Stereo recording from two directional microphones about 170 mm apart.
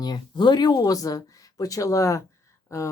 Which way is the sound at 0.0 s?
25° left (ahead or behind).